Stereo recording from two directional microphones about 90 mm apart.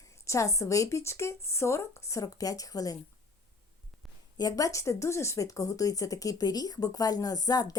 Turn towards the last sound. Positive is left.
turn(degrees=45)  # may be behind; listen again after turning